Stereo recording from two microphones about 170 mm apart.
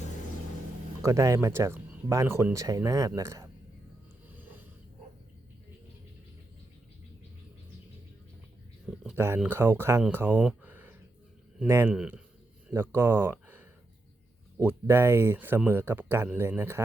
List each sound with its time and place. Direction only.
1.0 s speech: 20° right (ahead or behind)
9.1 s speech: 15° right (ahead or behind)
10.6 s a sound: 10° right (ahead or behind)
11.6 s speech: 15° right (ahead or behind)